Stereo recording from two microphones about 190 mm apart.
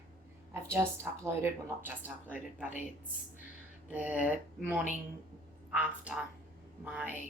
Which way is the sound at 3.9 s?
5° right (ahead or behind).